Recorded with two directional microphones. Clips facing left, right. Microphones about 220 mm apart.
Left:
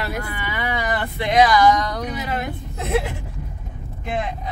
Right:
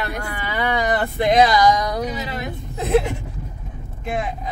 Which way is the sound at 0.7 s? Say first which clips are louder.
Right 5 dB; 45° right (ahead or behind).